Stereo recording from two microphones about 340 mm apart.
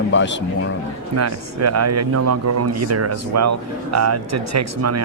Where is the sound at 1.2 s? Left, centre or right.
Right.